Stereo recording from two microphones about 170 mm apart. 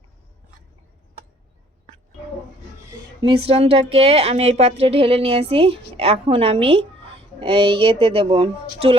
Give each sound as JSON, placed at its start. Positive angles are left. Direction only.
{"t": 2.9, "sound": "a woman's voice", "side_deg": -30}